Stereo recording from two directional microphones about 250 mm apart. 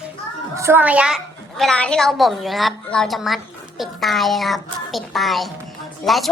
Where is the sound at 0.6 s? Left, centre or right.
Centre.